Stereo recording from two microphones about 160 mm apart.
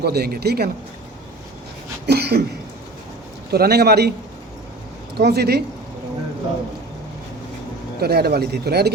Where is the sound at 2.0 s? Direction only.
90° right.